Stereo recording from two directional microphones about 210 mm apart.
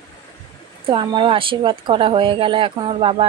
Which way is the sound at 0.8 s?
25° right (ahead or behind).